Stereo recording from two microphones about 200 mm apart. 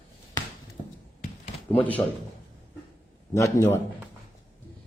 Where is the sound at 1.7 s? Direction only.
10° left (ahead or behind).